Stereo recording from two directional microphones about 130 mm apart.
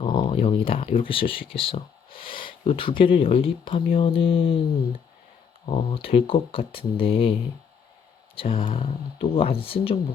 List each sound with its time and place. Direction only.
0.0 s speech: 40° left (ahead or behind)
5.6 s speech: 45° left (ahead or behind)
8.6 s speech: 50° left (ahead or behind)